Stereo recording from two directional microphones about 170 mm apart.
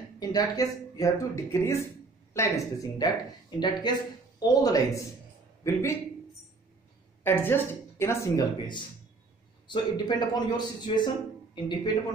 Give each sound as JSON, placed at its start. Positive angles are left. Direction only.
{"t": 0.2, "sound": "a man's voice", "side_deg": 20}
{"t": 7.2, "sound": "a woman's voice", "side_deg": 10}
{"t": 9.7, "sound": "speech", "side_deg": 25}